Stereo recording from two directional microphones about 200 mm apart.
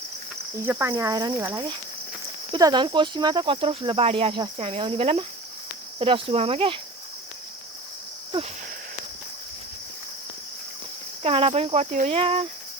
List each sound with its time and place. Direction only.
0.6 s speech: 10° right (ahead or behind); by 6.7 s 30° right (ahead or behind)
8.3 s speech: 20° right (ahead or behind)
11.2 s speech: 30° right (ahead or behind)